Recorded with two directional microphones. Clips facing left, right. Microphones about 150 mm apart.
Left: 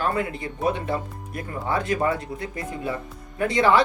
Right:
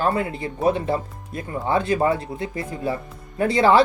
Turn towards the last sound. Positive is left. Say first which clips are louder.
# right 3 dB
turn(degrees=-30)  # may be behind; listen again after turning